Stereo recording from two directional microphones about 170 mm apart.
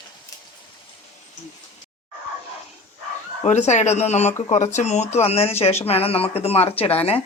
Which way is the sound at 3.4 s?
40° left (ahead or behind).